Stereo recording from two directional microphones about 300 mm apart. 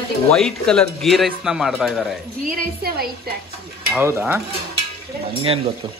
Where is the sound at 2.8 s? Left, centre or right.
Right.